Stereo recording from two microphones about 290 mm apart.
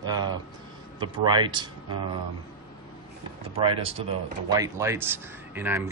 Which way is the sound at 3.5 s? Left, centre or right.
Centre.